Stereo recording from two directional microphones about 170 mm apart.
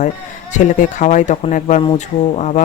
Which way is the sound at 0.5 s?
45° left (ahead or behind).